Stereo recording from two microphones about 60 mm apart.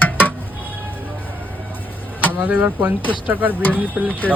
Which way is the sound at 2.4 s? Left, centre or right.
Right.